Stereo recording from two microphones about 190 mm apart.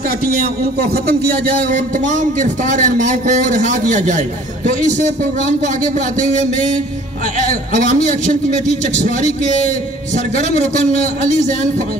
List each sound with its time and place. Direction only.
0.7 s speech: 55° right (ahead or behind)
2.0 s a man's voice: 40° right (ahead or behind)